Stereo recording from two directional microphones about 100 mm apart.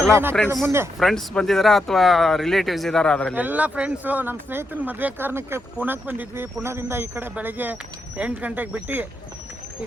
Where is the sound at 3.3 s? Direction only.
15° right (ahead or behind).